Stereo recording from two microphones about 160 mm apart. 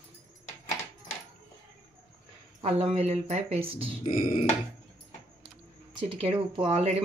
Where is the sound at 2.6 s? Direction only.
40° right (ahead or behind).